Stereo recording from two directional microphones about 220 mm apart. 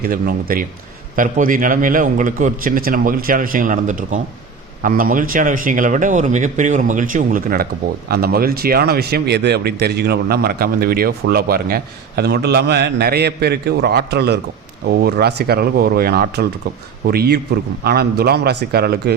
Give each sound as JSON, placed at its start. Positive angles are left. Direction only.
{"t": 0.0, "sound": "a man's voice", "side_deg": -40}